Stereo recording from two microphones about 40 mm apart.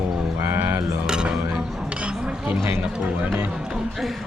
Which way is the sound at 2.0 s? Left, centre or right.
Right.